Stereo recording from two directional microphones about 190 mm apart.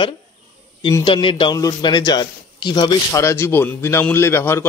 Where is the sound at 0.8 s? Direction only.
25° left (ahead or behind).